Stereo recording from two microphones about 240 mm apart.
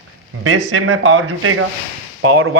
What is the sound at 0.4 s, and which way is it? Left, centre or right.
A man's voice, right.